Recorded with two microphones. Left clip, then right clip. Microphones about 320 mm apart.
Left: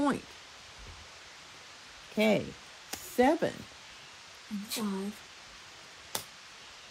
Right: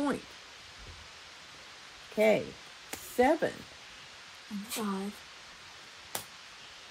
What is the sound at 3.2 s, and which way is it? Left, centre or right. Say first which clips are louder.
Speech: even; left.